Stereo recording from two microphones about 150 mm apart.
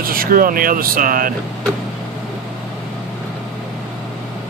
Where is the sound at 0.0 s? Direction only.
70° right (ahead or behind).